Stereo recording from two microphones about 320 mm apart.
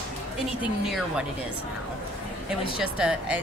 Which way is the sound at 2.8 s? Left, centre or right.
Centre.